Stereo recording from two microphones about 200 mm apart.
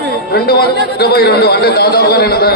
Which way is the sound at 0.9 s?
50° left (ahead or behind).